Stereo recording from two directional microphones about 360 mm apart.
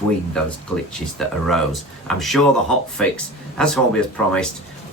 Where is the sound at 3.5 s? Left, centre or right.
Centre.